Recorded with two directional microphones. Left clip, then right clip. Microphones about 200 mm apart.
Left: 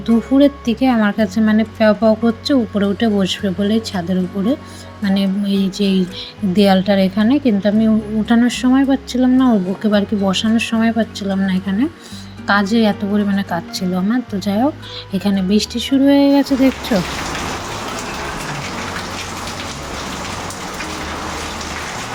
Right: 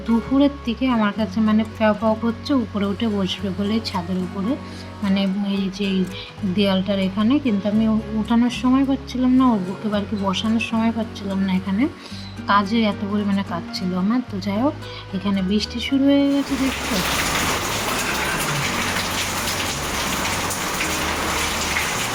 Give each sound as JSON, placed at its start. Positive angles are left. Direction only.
{"t": 0.3, "sound": "a woman's voice", "side_deg": 20}